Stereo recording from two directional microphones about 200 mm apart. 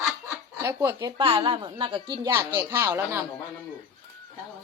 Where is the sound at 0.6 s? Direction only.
10° right (ahead or behind).